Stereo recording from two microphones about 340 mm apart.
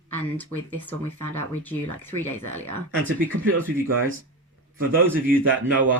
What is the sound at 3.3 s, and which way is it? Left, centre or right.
Speech, right.